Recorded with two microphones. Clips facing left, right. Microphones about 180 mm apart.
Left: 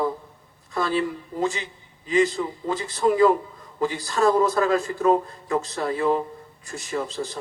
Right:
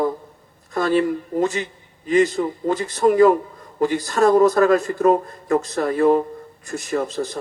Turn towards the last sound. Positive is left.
turn(degrees=-45)  # may be behind; listen again after turning